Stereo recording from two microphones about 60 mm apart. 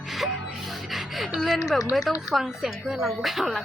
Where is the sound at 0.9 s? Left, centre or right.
Centre.